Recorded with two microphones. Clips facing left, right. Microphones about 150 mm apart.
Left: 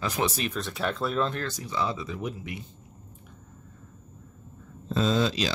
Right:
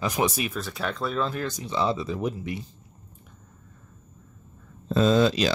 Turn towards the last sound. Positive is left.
turn(degrees=-55)  # may be behind; listen again after turning